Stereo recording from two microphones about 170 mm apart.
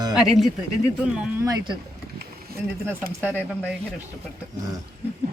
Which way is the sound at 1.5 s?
25° right (ahead or behind).